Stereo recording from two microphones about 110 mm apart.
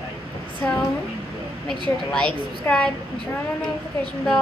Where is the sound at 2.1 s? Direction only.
10° left (ahead or behind).